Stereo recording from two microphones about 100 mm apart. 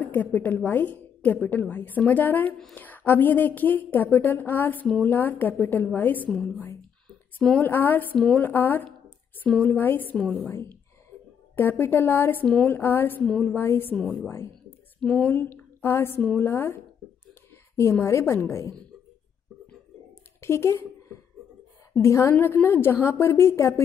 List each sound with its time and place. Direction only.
0.0 s a woman's voice: 20° left (ahead or behind)
6.3 s a woman's voice: 5° left (ahead or behind)
7.6 s a woman's voice: 20° left (ahead or behind)
10.1 s a woman's voice: centre (ahead or behind)
11.8 s a woman's voice: 20° left (ahead or behind)
13.2 s a woman's voice: 10° left (ahead or behind)
13.6 s a woman's voice: 20° left (ahead or behind)
15.0 s a woman's voice: 10° left (ahead or behind)
17.3 s a sound: 25° left (ahead or behind)
18.0 s a woman's voice: 25° left (ahead or behind)
20.3 s a sound: 25° left (ahead or behind)
22.0 s a woman's voice: 30° left (ahead or behind)